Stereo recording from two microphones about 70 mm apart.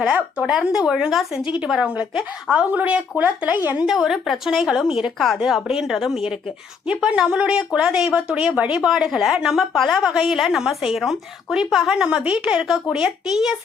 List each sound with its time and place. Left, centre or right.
0.0 s speech: centre
3.8 s speech: centre